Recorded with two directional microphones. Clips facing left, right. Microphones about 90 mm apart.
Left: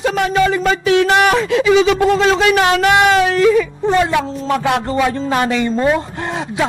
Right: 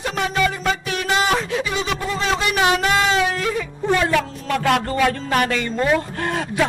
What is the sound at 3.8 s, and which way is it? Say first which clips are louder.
A woman's voice: right 1 dB; 15° left (ahead or behind).